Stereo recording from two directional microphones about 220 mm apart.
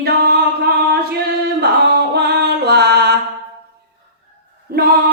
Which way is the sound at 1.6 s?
45° right (ahead or behind).